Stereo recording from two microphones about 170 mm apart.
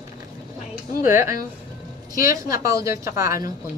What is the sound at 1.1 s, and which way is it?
A woman's voice, 15° right (ahead or behind).